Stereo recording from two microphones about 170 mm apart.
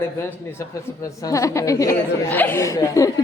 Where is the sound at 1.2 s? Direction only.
20° left (ahead or behind).